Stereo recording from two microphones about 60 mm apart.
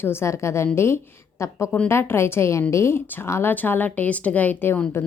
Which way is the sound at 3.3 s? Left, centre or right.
Left.